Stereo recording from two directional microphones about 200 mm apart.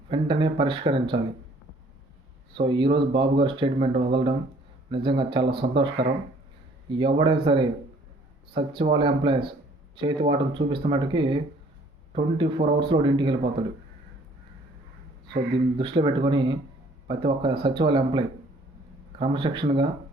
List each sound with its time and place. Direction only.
0.1 s speech: 25° right (ahead or behind)
2.5 s speech: 25° right (ahead or behind)
15.3 s speech: 25° right (ahead or behind)